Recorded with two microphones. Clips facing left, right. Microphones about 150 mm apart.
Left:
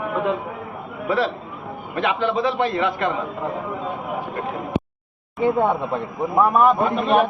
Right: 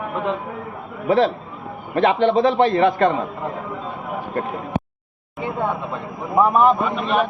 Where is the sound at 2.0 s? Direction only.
35° right (ahead or behind).